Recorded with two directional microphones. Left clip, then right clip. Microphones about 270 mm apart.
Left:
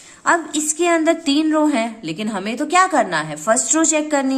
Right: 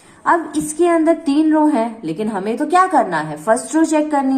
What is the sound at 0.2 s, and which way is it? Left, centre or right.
A woman's voice, left.